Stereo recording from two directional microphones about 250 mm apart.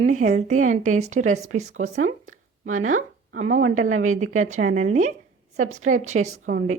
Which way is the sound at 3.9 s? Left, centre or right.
Right.